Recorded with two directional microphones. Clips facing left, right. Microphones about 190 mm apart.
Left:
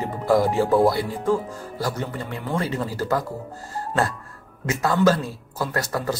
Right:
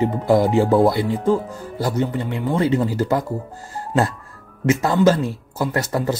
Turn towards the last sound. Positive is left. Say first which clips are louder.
# right 4 dB
turn(degrees=-25)  # may be behind; listen again after turning